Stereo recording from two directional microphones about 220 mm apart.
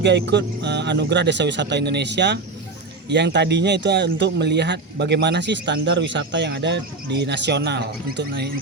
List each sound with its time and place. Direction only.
0.0 s speech: 50° right (ahead or behind)